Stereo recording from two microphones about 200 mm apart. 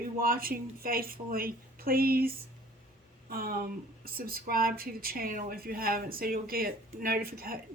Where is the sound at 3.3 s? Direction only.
45° right (ahead or behind).